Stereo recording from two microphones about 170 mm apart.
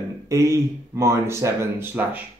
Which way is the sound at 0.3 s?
15° right (ahead or behind).